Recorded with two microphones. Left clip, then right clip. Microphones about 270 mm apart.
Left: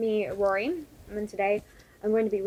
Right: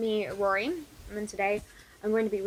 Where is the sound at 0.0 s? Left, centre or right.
Right.